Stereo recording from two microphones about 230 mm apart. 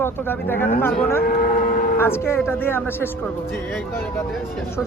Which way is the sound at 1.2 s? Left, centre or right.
Left.